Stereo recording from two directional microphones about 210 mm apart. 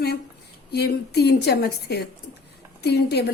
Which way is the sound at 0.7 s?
50° left (ahead or behind).